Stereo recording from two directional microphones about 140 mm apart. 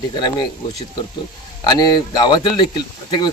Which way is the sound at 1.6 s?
30° left (ahead or behind).